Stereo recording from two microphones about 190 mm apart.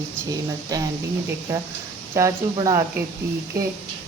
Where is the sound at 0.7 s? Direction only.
20° right (ahead or behind).